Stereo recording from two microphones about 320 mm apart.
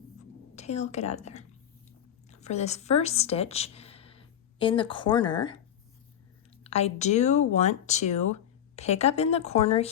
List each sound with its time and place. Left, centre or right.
0.5 s a woman's voice: centre
6.7 s a woman's voice: centre